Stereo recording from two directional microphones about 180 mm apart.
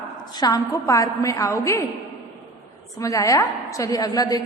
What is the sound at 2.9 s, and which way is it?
A woman's voice, 20° left (ahead or behind).